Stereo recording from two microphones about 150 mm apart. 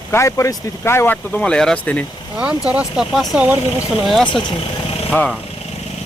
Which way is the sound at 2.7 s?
5° right (ahead or behind).